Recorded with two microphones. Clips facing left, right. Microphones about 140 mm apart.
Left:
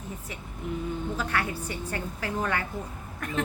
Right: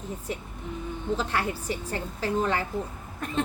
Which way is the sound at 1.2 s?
25° right (ahead or behind).